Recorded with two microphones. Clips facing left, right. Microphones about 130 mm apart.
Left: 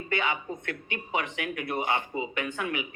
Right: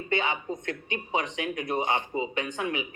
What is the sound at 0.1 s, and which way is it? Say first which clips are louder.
Speech: right 1 dB; 25° right (ahead or behind).